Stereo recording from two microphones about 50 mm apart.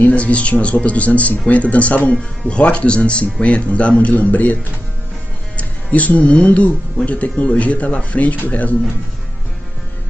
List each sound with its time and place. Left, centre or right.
0.1 s speech: left
5.6 s speech: left